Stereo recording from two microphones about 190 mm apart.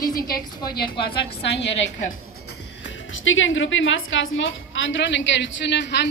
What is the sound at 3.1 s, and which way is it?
A woman's voice, 90° left.